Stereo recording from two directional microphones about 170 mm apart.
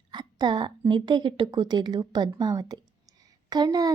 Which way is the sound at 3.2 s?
25° right (ahead or behind).